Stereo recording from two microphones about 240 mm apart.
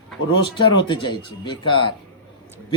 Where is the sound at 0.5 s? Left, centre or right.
Centre.